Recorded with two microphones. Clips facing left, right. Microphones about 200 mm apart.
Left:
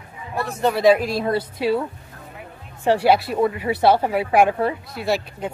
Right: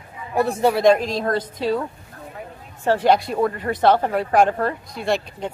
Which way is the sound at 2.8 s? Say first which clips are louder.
Left 1 dB; 10° left (ahead or behind).